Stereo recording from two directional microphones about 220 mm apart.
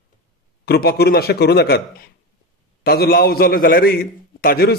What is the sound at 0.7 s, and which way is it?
A man's voice, 45° left (ahead or behind).